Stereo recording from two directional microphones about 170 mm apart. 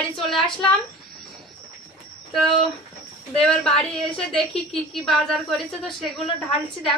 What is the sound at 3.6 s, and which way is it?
Speech, 5° left (ahead or behind).